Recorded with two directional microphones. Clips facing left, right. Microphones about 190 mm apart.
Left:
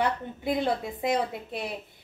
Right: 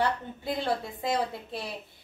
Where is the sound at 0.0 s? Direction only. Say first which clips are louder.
Left 1 dB; 20° left (ahead or behind).